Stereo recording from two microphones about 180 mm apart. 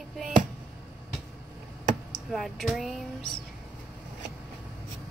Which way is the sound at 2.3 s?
Centre (ahead or behind).